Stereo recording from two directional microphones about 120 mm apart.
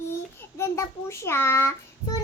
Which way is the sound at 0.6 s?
25° left (ahead or behind).